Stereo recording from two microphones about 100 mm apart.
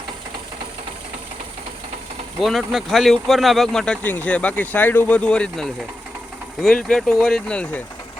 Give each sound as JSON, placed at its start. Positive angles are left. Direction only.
{"t": 2.4, "sound": "speech", "side_deg": -5}
{"t": 4.0, "sound": "speech", "side_deg": 20}